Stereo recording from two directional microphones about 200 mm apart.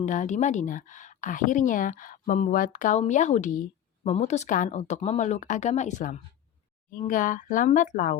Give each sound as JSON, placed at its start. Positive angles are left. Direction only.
{"t": 0.0, "sound": "a woman's voice", "side_deg": 40}